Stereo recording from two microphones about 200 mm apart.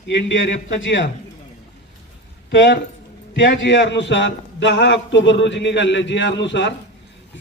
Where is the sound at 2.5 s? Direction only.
60° left (ahead or behind).